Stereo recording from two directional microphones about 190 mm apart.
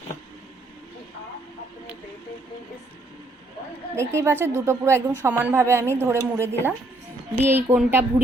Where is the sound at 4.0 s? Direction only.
15° right (ahead or behind).